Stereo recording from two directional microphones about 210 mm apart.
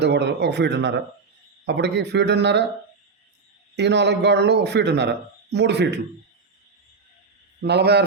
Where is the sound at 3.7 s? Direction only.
55° right (ahead or behind).